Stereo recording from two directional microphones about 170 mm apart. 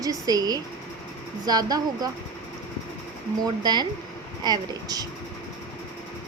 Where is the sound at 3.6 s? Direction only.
25° right (ahead or behind).